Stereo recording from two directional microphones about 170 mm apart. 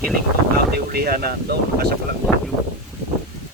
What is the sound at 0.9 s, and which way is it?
Speech, 65° right (ahead or behind).